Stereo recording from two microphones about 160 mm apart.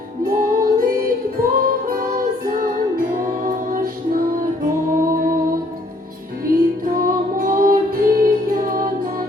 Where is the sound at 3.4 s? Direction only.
60° right (ahead or behind).